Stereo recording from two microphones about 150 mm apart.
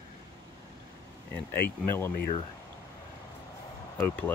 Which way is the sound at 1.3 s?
15° left (ahead or behind).